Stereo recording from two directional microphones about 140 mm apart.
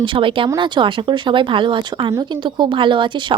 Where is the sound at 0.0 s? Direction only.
35° right (ahead or behind).